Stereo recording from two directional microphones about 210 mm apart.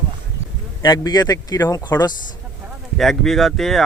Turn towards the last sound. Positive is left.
turn(degrees=0)  # may be behind; listen again after turning